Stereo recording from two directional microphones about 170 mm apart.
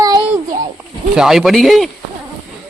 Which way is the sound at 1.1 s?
Centre (ahead or behind).